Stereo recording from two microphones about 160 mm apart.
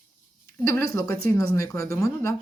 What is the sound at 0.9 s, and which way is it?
Speech, 20° left (ahead or behind).